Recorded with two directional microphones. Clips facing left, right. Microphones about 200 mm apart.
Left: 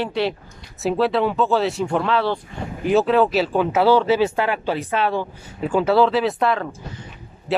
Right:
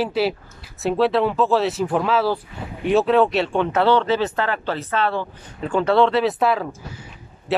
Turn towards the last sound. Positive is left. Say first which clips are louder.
# even
turn(degrees=0)  # may be behind; listen again after turning